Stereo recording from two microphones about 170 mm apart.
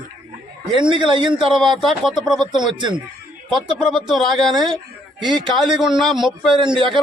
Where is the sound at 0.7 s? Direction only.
30° right (ahead or behind).